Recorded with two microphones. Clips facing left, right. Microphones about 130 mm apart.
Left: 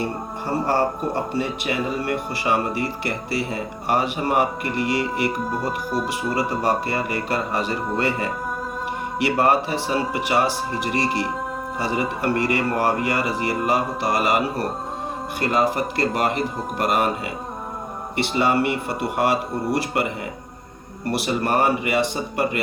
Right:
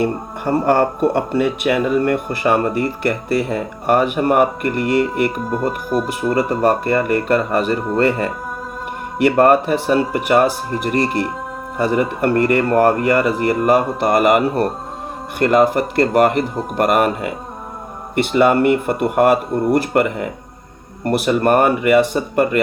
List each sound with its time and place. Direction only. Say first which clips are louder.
0.0 s speech: right 7 dB; 55° right (ahead or behind)
5.4 s speech: right 4 dB; centre (ahead or behind)
6.3 s speech: right 6 dB; 55° right (ahead or behind)